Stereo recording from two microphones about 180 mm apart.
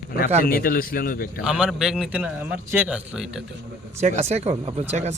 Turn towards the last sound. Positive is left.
turn(degrees=-35)  # may be behind; listen again after turning